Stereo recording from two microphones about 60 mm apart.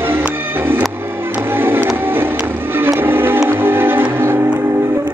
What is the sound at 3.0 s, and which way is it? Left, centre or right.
Music, right.